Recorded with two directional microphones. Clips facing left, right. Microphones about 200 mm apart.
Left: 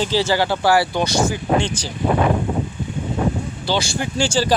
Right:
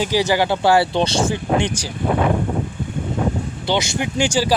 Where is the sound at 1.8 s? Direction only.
15° right (ahead or behind).